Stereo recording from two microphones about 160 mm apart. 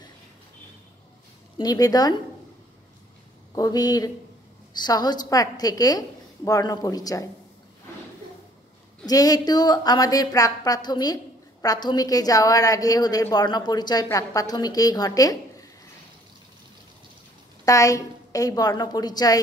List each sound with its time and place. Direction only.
1.6 s a woman's voice: 25° left (ahead or behind)
3.5 s a woman's voice: 25° left (ahead or behind)
9.0 s a woman's voice: 25° left (ahead or behind)
17.6 s a woman's voice: 20° left (ahead or behind)